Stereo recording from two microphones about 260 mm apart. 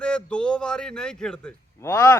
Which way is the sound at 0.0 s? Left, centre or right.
Centre.